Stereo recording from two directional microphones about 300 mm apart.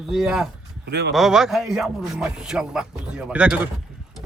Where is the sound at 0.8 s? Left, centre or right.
Right.